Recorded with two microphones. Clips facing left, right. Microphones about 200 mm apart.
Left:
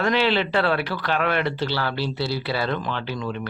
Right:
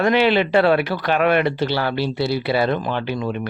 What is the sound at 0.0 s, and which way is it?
Speech, 15° right (ahead or behind).